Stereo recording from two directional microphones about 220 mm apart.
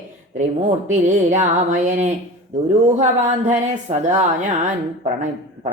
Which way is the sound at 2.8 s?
30° right (ahead or behind).